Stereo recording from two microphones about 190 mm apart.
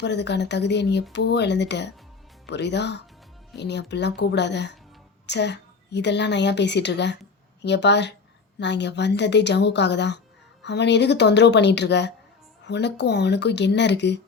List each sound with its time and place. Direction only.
0.0 s a woman's voice: 65° left (ahead or behind)